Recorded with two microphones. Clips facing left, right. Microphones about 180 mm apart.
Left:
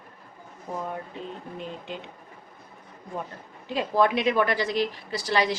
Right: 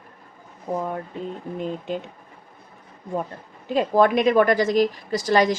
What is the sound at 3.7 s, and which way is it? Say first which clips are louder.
A woman's voice: right 5 dB; 50° right (ahead or behind).